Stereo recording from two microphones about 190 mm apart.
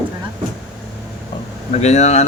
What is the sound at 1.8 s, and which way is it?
Speech, 35° left (ahead or behind).